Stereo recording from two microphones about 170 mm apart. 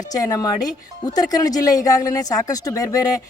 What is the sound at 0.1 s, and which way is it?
Speech, 20° left (ahead or behind).